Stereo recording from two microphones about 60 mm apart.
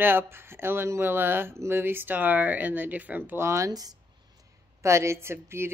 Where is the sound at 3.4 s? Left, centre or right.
Right.